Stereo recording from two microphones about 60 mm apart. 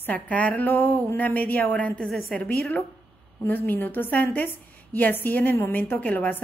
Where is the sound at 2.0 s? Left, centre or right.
Centre.